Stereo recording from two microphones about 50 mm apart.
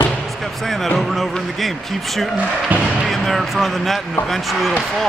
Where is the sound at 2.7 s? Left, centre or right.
Right.